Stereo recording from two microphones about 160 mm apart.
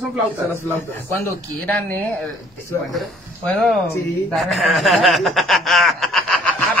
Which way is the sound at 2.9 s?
Centre (ahead or behind).